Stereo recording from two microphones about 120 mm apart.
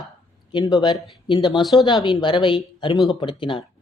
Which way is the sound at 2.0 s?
40° left (ahead or behind).